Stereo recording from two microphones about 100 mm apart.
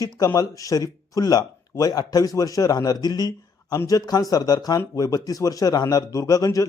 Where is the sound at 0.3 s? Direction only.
35° left (ahead or behind).